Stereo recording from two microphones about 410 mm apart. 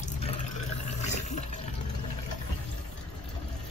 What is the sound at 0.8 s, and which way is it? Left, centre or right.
Water, centre.